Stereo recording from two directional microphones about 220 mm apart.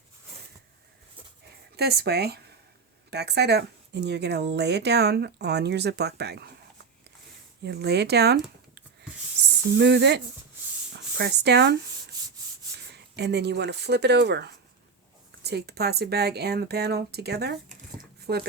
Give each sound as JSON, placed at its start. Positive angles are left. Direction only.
{"t": 1.7, "sound": "speech", "side_deg": -45}
{"t": 7.6, "sound": "speech", "side_deg": -50}
{"t": 9.7, "sound": "speech", "side_deg": -50}
{"t": 12.9, "sound": "speech", "side_deg": -50}